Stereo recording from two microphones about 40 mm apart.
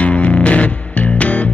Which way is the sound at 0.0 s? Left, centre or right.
Left.